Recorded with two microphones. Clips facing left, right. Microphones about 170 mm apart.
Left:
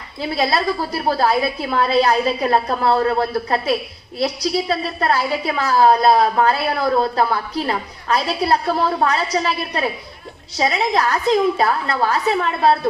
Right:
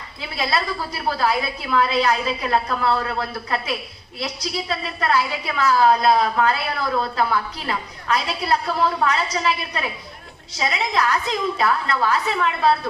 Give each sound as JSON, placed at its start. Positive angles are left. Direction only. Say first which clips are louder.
{"t": 0.2, "sound": "a woman's voice", "louder": "left 5 dB", "side_deg": 40}